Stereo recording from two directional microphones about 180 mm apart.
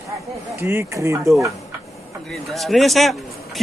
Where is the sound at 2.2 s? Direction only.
Centre (ahead or behind).